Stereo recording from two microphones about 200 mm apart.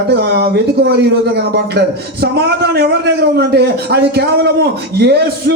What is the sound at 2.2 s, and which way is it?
A man's voice, 55° right (ahead or behind).